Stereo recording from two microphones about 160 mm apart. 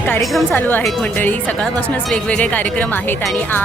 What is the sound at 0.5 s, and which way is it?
Speech, 10° left (ahead or behind).